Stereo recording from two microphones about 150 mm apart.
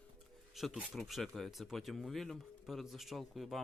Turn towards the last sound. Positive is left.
turn(degrees=0)  # may be behind; listen again after turning